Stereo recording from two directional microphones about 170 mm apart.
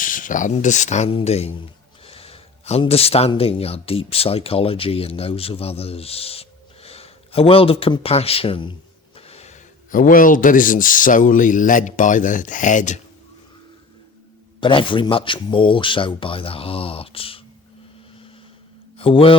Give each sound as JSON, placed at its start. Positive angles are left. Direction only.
{"t": 0.0, "sound": "speech", "side_deg": 50}
{"t": 14.6, "sound": "speech", "side_deg": 30}
{"t": 18.9, "sound": "mantra", "side_deg": 30}